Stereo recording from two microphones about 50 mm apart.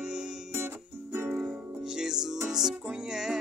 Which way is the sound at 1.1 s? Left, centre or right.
Right.